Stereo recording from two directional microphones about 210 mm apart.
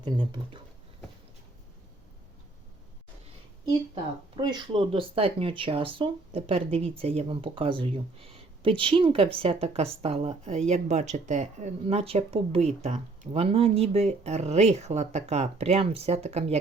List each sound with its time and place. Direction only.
0.0 s speech: 20° right (ahead or behind)
3.7 s speech: 20° right (ahead or behind)